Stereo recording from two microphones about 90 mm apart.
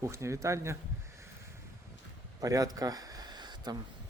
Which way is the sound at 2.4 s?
40° right (ahead or behind).